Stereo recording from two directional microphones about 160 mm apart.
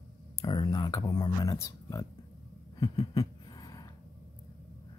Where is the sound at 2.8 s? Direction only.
25° left (ahead or behind).